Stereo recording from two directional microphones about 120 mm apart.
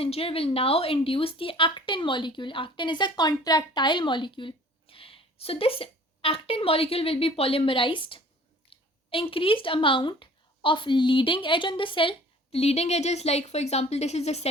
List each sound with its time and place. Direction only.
0.0 s speech: 55° left (ahead or behind)
8.7 s a sound: 45° left (ahead or behind)
9.0 s speech: 50° left (ahead or behind)